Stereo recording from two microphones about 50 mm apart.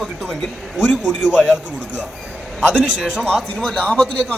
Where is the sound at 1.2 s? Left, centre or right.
Centre.